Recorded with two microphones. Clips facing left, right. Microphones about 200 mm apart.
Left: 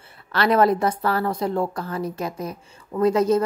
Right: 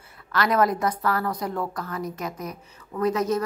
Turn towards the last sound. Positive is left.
turn(degrees=30)  # may be behind; listen again after turning